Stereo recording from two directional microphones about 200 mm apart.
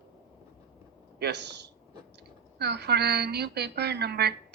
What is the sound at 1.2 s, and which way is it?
A woman's voice, 60° right (ahead or behind).